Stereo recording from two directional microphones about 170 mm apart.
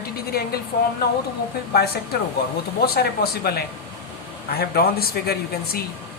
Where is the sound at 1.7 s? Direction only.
70° left (ahead or behind).